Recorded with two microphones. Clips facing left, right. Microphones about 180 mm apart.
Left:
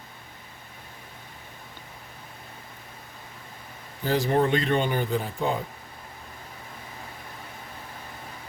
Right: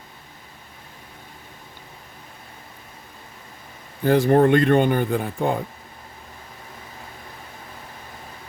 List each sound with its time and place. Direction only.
4.0 s speech: 55° right (ahead or behind)